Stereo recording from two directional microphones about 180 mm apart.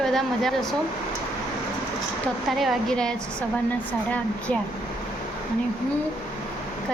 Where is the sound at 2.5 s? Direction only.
Centre (ahead or behind).